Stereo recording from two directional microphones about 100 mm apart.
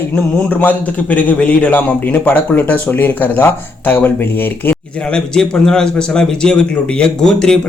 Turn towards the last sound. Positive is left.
turn(degrees=5)  # may be behind; listen again after turning